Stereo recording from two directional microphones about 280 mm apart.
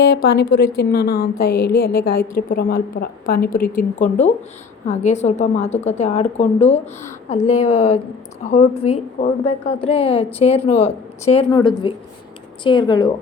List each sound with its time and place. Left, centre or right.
0.4 s a woman's voice: left
0.8 s a woman's voice: left; by 13.1 s centre